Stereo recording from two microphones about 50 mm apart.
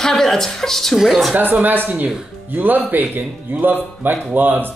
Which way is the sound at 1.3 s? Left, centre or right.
Right.